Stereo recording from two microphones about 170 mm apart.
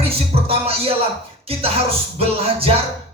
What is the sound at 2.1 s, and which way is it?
Music, 35° right (ahead or behind).